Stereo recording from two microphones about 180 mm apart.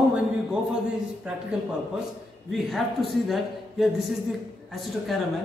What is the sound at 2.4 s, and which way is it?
A man's voice, centre (ahead or behind).